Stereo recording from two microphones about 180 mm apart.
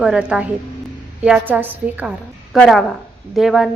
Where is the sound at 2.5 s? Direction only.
Centre (ahead or behind).